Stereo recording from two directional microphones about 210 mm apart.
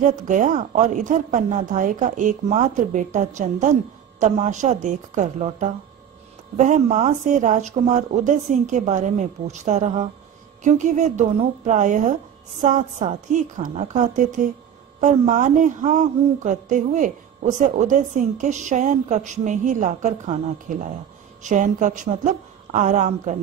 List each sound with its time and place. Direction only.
0.0 s speech: 40° right (ahead or behind)